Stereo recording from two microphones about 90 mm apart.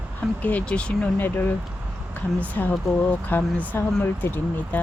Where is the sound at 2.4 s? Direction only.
20° left (ahead or behind).